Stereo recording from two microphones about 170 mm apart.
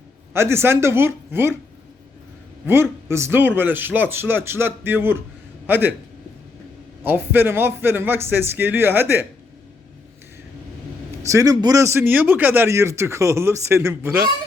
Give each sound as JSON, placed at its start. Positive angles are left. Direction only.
{"t": 0.3, "sound": "a man's voice", "side_deg": -15}
{"t": 3.1, "sound": "a man's voice", "side_deg": -15}
{"t": 7.0, "sound": "a man's voice", "side_deg": -10}
{"t": 11.2, "sound": "a man's voice", "side_deg": -20}